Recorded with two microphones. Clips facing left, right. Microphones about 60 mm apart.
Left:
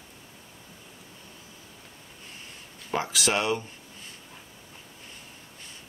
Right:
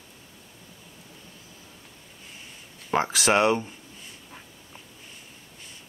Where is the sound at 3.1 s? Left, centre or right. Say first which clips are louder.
Right 6 dB; right.